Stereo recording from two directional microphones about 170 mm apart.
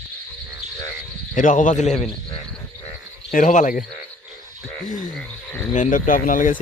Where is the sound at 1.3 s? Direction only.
50° left (ahead or behind).